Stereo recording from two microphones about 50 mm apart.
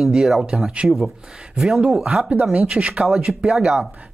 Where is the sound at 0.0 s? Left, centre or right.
Centre.